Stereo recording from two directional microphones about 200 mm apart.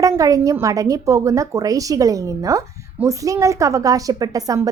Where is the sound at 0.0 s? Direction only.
15° right (ahead or behind).